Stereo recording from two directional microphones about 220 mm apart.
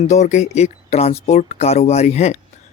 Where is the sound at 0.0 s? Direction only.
30° left (ahead or behind).